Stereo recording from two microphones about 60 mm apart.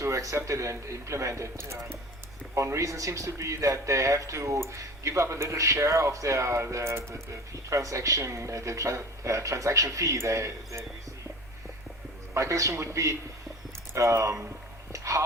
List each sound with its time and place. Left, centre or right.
0.0 s speech: right
7.7 s speech: right
12.3 s speech: right
14.9 s a sound: right